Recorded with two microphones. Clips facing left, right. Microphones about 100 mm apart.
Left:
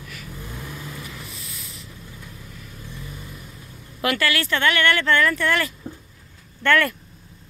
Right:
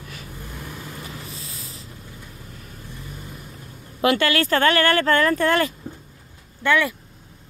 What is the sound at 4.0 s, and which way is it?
Speech, 30° right (ahead or behind).